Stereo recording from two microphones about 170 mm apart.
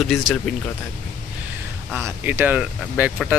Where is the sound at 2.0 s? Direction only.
10° right (ahead or behind).